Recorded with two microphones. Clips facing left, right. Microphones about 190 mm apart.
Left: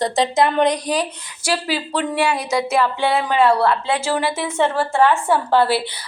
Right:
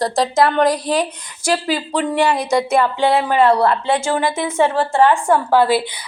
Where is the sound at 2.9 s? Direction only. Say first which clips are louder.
Right 3 dB; 50° right (ahead or behind).